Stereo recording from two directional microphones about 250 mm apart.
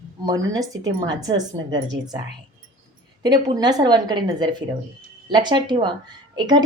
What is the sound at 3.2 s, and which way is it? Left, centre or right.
A woman's voice, centre.